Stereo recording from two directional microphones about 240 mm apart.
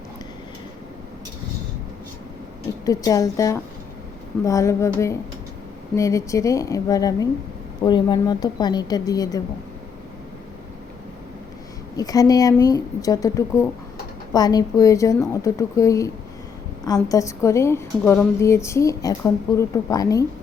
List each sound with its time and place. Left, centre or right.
2.8 s a woman's voice: centre
11.9 s a woman's voice: centre